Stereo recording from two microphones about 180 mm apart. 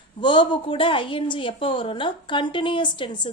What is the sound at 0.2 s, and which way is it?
A woman's voice, 25° left (ahead or behind).